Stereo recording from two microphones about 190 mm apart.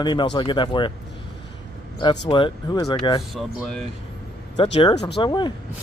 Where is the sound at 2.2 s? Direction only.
25° left (ahead or behind).